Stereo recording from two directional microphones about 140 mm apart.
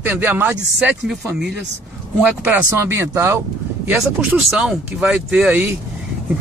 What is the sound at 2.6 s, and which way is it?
Speech, 15° right (ahead or behind).